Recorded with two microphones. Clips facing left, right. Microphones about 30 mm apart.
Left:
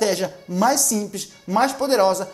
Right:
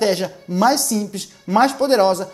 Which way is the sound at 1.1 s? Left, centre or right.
Right.